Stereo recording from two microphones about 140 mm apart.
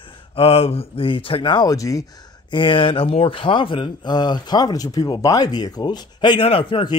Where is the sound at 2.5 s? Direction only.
40° left (ahead or behind).